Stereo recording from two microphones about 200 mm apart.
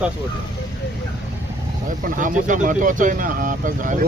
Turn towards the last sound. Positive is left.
turn(degrees=-40)  # may be behind; listen again after turning